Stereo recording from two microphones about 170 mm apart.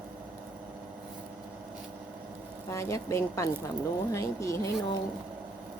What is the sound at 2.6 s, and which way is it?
Speech, 15° left (ahead or behind).